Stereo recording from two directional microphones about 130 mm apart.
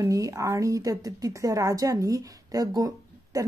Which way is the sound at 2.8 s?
30° right (ahead or behind).